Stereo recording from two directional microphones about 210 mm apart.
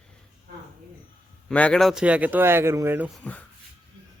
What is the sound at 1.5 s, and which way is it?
Speech, 5° left (ahead or behind).